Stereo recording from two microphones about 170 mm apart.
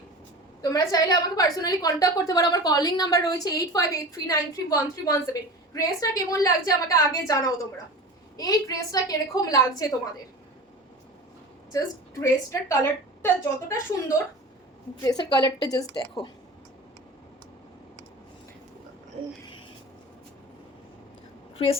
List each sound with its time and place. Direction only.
0.6 s a woman's voice: 20° left (ahead or behind)
12.2 s a woman's voice: 20° left (ahead or behind)
21.6 s a woman's voice: 35° left (ahead or behind)